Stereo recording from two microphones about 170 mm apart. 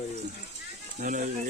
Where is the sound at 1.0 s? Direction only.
50° right (ahead or behind).